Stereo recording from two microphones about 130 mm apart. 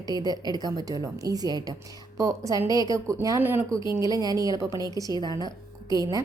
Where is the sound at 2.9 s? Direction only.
25° right (ahead or behind).